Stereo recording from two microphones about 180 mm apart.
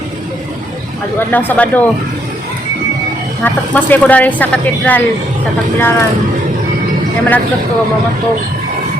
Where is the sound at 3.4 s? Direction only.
10° left (ahead or behind).